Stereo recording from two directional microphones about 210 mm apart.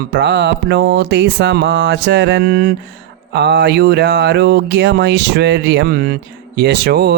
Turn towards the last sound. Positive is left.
turn(degrees=-50)  # may be behind; listen again after turning